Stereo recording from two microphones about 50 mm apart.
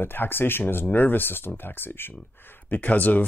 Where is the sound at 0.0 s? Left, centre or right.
Left.